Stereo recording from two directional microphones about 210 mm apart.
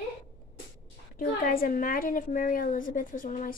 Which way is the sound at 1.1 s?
45° left (ahead or behind).